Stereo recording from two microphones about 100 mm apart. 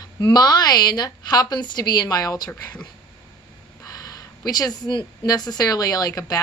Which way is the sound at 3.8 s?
35° left (ahead or behind).